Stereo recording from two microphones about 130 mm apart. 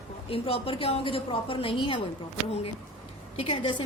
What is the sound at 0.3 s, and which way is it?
A woman's voice, 45° left (ahead or behind).